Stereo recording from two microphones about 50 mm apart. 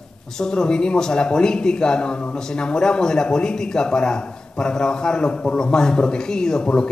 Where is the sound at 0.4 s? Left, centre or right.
Centre.